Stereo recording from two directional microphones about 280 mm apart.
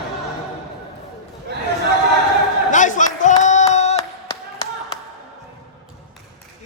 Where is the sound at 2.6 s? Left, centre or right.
Left.